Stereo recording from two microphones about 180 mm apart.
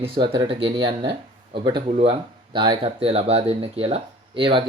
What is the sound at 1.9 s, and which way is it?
Speech, 35° right (ahead or behind).